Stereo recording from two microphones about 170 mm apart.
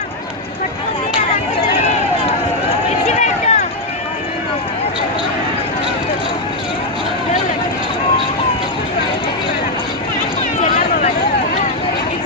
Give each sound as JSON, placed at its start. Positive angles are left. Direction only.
{"t": 3.1, "sound": "run", "side_deg": 45}